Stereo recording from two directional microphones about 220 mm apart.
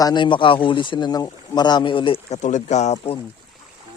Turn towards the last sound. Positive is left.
turn(degrees=25)  # may be behind; listen again after turning